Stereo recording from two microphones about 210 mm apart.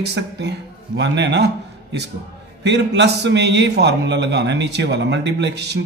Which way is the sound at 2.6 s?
55° right (ahead or behind).